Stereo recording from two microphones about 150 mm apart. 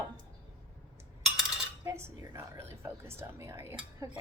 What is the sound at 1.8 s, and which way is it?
A woman's voice, 20° right (ahead or behind).